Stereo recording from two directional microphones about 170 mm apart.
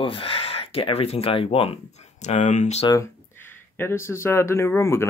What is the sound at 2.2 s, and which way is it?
Speech, 45° left (ahead or behind).